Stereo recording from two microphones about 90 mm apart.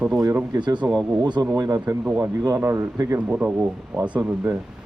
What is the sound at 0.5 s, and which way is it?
Speech, 55° right (ahead or behind).